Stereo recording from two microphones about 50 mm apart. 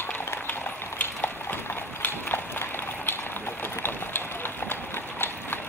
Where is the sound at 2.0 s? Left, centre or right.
Left.